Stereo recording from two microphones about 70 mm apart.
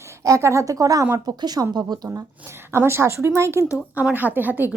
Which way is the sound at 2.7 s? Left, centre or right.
Right.